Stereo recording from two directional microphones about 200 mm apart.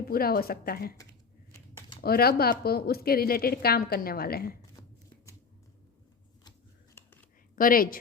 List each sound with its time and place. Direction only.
0.1 s a woman's voice: 50° left (ahead or behind)
2.0 s a woman's voice: 50° left (ahead or behind)
4.8 s shuffling cards: 20° left (ahead or behind)
6.9 s whispering: 10° left (ahead or behind)
7.5 s a woman's voice: 45° left (ahead or behind)